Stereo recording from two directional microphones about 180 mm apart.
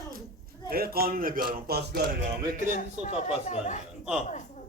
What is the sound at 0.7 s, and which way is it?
A man's voice, 55° right (ahead or behind).